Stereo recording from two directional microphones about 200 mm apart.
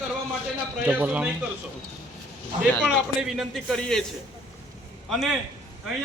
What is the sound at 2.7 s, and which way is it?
A man's voice, centre (ahead or behind).